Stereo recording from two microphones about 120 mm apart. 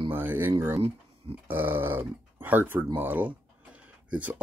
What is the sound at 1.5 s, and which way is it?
Speech, 15° right (ahead or behind).